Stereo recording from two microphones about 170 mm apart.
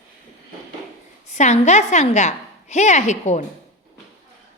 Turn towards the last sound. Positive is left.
turn(degrees=45)  # may be behind; listen again after turning